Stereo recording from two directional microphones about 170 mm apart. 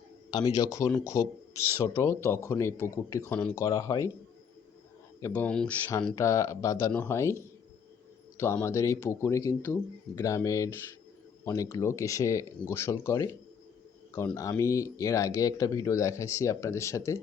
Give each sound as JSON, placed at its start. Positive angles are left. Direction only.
{"t": 0.3, "sound": "a man's voice", "side_deg": 25}
{"t": 5.2, "sound": "speech", "side_deg": 10}
{"t": 6.1, "sound": "speech", "side_deg": 15}
{"t": 8.4, "sound": "a man's voice", "side_deg": 15}